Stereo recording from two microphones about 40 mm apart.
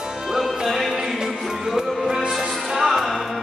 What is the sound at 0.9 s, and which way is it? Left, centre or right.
Music, centre.